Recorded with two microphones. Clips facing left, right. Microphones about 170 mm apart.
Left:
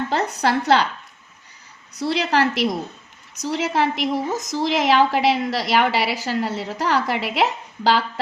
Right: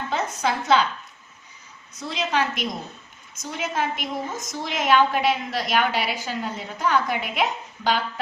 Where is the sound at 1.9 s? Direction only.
70° left (ahead or behind).